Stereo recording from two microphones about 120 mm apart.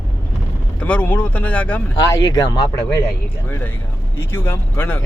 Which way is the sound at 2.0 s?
35° left (ahead or behind).